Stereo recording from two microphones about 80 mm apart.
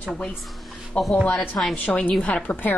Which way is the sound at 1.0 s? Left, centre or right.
Centre.